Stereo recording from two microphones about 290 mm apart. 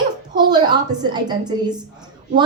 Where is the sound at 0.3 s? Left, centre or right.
Centre.